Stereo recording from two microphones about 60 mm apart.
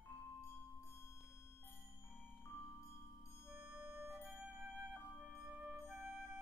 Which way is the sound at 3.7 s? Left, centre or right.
Centre.